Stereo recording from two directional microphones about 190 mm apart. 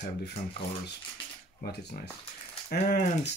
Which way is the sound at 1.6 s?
50° left (ahead or behind).